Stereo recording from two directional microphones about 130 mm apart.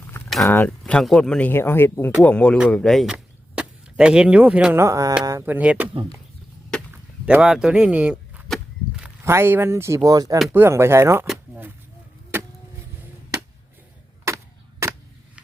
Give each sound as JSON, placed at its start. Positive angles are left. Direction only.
{"t": 0.4, "sound": "speech", "side_deg": 15}
{"t": 1.5, "sound": "speech", "side_deg": 15}
{"t": 5.5, "sound": "speech", "side_deg": -10}
{"t": 7.3, "sound": "speech", "side_deg": -5}
{"t": 8.4, "sound": "a sound", "side_deg": 0}
{"t": 9.2, "sound": "speech", "side_deg": -20}
{"t": 14.8, "sound": "a sound", "side_deg": -20}